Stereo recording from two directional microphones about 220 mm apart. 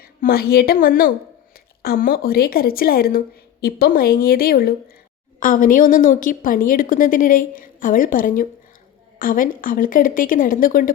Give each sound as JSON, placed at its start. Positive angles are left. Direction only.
{"t": 0.0, "sound": "a woman's voice", "side_deg": 45}